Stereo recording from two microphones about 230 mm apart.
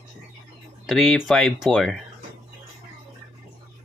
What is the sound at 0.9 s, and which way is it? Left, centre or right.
Speech, centre.